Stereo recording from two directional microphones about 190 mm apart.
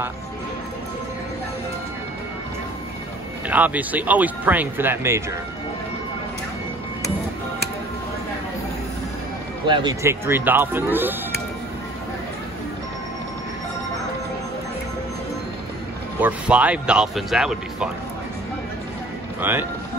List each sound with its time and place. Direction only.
3.4 s speech: 10° right (ahead or behind)
9.7 s speech: 25° right (ahead or behind)
10.0 s speech: 10° right (ahead or behind)
16.2 s speech: 5° right (ahead or behind)
19.4 s speech: 10° right (ahead or behind)